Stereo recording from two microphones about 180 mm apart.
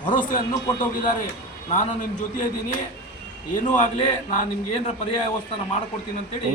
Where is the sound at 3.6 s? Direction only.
40° left (ahead or behind).